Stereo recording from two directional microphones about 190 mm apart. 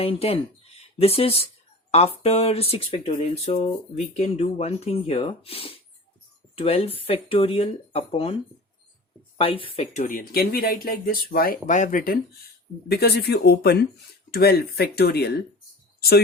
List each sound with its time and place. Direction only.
0.0 s speech: 30° left (ahead or behind)
9.4 s speech: 30° left (ahead or behind)
10.0 s speech: 50° left (ahead or behind)
12.9 s speech: 55° left (ahead or behind)